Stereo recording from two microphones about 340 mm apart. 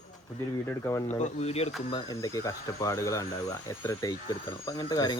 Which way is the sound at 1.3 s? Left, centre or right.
Centre.